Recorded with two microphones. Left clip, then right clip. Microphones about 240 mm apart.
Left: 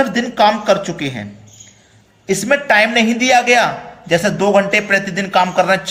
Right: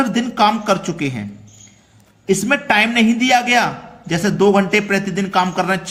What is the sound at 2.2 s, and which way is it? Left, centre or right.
A man's voice, right.